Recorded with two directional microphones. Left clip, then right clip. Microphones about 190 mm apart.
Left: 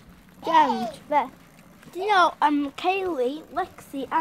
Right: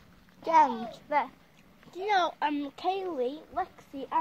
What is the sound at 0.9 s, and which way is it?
Speech, 5° right (ahead or behind).